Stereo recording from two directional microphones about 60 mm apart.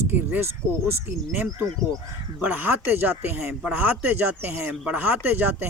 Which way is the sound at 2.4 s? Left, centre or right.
Right.